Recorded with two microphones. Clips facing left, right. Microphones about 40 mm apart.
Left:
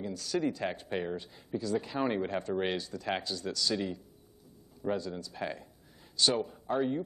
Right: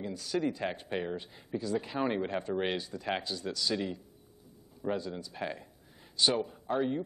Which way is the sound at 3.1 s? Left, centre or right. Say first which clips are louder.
Even; centre.